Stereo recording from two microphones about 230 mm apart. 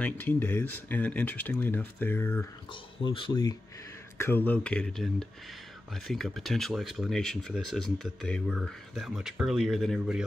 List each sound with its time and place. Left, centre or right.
0.0 s speech: centre
2.7 s speech: left
4.2 s speech: centre